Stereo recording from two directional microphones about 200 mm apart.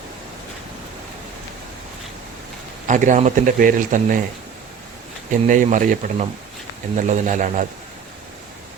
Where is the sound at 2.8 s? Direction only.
40° right (ahead or behind).